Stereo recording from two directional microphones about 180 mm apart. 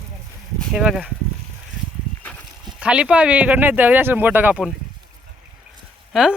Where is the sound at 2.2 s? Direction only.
5° left (ahead or behind).